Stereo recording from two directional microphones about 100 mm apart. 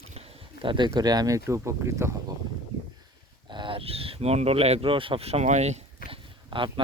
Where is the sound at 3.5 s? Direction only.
55° right (ahead or behind).